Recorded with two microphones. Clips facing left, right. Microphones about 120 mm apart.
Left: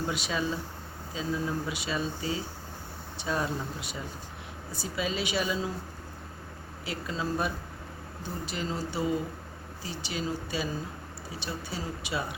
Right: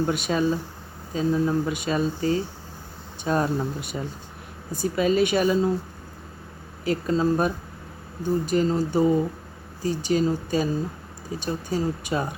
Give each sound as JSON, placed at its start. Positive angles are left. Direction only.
{"t": 0.1, "sound": "speech", "side_deg": -50}
{"t": 6.8, "sound": "speech", "side_deg": -45}